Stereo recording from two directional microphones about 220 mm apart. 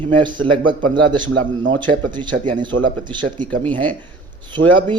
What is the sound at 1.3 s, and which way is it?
Speech, 60° right (ahead or behind).